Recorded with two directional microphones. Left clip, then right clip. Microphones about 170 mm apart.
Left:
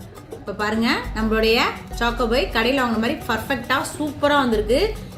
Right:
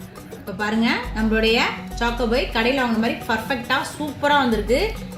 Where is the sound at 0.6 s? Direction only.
25° right (ahead or behind).